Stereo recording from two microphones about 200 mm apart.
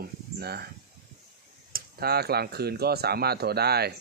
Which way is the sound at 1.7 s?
50° right (ahead or behind).